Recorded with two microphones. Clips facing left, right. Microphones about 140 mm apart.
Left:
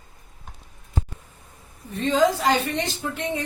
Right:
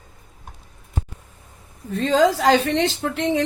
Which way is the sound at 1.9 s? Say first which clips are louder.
Right 3 dB; 90° right.